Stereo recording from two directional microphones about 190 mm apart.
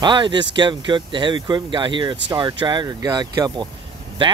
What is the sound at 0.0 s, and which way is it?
Speech, 25° right (ahead or behind).